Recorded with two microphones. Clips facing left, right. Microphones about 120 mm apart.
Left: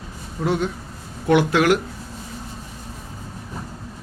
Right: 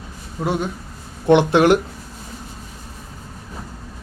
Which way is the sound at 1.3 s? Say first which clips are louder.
Right 3 dB; 25° right (ahead or behind).